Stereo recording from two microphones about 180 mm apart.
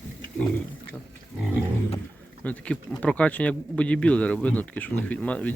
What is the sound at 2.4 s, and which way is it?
Speech, 5° left (ahead or behind).